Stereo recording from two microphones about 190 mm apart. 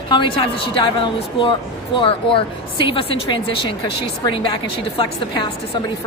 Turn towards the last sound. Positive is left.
turn(degrees=25)  # may be behind; listen again after turning